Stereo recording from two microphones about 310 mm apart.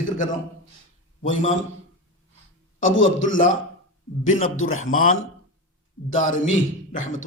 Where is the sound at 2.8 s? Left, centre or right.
Left.